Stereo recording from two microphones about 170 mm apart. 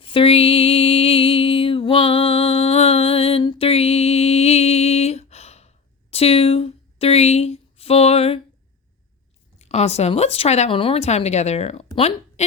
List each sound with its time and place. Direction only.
0.0 s music: 30° left (ahead or behind)
9.6 s speech: 40° left (ahead or behind)